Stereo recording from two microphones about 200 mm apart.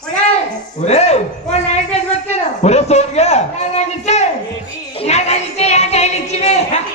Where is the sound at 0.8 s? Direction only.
35° left (ahead or behind).